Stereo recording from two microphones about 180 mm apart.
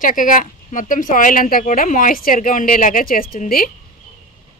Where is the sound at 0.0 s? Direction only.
50° left (ahead or behind).